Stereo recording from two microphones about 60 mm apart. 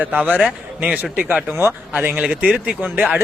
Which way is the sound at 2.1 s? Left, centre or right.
Right.